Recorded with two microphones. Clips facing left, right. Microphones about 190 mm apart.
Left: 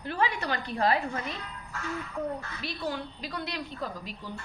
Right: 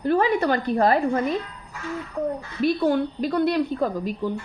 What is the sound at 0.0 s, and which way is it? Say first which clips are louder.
A woman's voice: right 10 dB; 50° right (ahead or behind).